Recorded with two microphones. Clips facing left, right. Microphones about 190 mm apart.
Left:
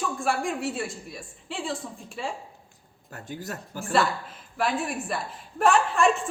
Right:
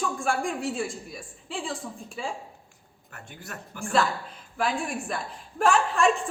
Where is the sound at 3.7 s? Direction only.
35° left (ahead or behind).